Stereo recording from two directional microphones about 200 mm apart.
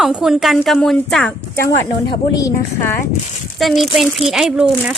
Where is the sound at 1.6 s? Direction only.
15° left (ahead or behind).